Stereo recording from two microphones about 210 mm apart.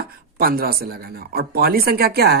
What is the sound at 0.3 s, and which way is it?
Speech, 45° right (ahead or behind).